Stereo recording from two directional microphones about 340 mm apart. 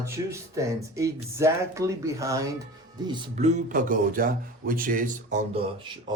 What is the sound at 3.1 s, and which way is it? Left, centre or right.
Speech, centre.